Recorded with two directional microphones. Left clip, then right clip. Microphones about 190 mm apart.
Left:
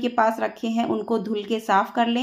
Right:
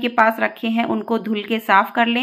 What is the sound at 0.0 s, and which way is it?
Speech, 20° right (ahead or behind).